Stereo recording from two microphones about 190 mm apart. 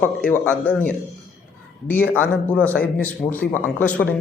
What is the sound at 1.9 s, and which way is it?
A man's voice, 10° left (ahead or behind).